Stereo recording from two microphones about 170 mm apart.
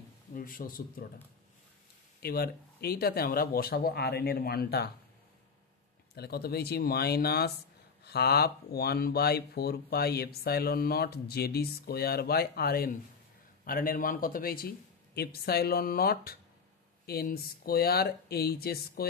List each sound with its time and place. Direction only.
0.3 s speech: 55° left (ahead or behind)
2.2 s speech: 65° left (ahead or behind)
6.1 s speech: 70° left (ahead or behind)